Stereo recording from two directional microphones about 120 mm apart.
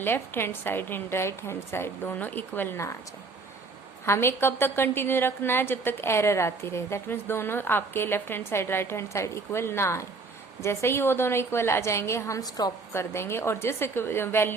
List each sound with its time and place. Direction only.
0.0 s a woman's voice: 20° left (ahead or behind)
4.0 s a woman's voice: 20° left (ahead or behind)
12.9 s a woman's voice: 20° left (ahead or behind)